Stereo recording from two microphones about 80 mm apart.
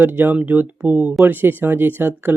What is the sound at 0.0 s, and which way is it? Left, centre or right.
Speech, right.